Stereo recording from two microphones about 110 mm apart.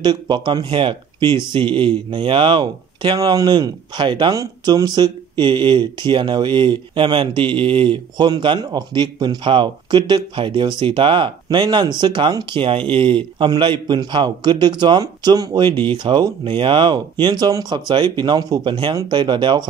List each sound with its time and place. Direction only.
0.0 s speech: 45° right (ahead or behind)
3.2 s speech: 35° right (ahead or behind)